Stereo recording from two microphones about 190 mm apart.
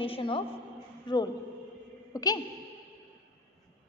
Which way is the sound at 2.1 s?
15° left (ahead or behind).